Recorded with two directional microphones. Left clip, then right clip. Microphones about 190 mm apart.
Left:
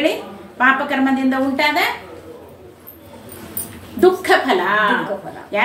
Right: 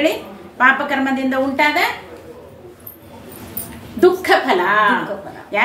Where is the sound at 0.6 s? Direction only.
20° right (ahead or behind).